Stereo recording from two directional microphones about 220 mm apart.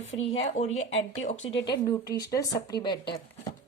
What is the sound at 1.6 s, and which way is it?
Speech, 15° left (ahead or behind).